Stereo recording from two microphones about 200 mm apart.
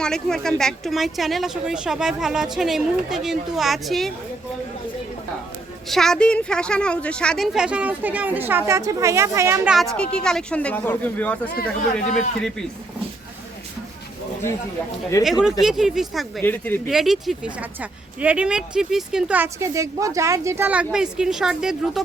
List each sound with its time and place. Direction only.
0.0 s speech: centre (ahead or behind)
5.9 s speech: centre (ahead or behind); by 9.7 s 15° right (ahead or behind)
9.7 s speech: 5° left (ahead or behind)
15.2 s speech: 5° right (ahead or behind)
16.4 s speech: 10° left (ahead or behind)
16.9 s speech: centre (ahead or behind)